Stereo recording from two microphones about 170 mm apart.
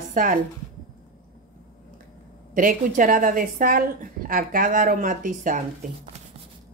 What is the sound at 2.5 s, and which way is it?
A woman's voice, 50° right (ahead or behind).